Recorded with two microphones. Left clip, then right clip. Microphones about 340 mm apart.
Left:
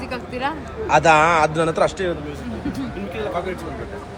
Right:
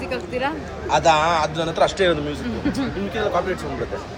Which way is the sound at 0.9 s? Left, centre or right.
Left.